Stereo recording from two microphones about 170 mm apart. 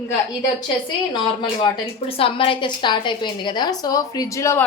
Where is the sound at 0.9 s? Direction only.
30° left (ahead or behind).